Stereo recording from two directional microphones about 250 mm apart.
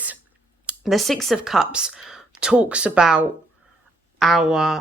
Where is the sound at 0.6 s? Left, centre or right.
Centre.